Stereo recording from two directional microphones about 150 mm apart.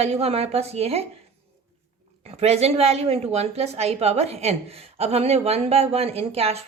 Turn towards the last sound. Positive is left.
turn(degrees=-45)  # may be behind; listen again after turning